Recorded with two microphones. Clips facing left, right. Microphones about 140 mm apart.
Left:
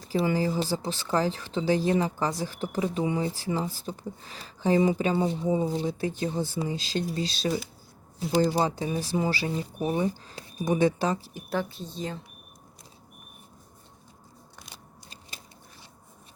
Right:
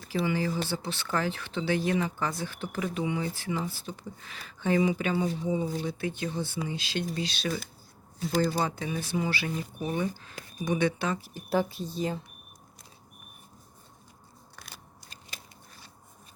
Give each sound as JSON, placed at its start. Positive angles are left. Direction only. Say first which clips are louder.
{"t": 0.0, "sound": "speech", "louder": "left 3 dB", "side_deg": 35}
{"t": 5.2, "sound": "speech", "louder": "left 3 dB", "side_deg": 25}
{"t": 5.5, "sound": "speech", "louder": "left 4 dB", "side_deg": 40}
{"t": 11.4, "sound": "speech", "louder": "right 3 dB", "side_deg": -10}